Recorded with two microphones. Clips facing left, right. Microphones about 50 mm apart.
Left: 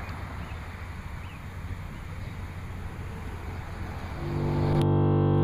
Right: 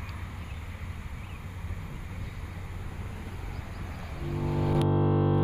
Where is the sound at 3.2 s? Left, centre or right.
Left.